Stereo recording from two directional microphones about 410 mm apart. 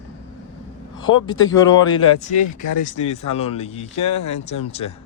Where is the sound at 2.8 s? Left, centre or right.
Centre.